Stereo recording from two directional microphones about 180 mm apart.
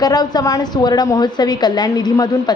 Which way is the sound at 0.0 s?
20° left (ahead or behind).